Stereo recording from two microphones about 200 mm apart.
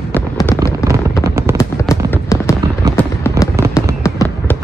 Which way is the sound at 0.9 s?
15° right (ahead or behind).